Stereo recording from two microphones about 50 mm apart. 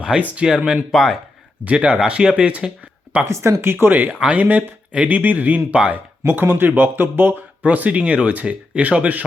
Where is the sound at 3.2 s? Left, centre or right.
Right.